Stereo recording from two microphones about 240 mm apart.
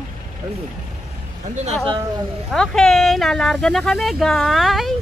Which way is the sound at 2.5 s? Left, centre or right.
Centre.